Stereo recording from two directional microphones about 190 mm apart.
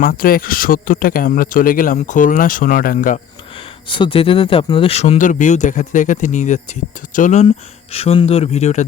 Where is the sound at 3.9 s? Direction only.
25° left (ahead or behind).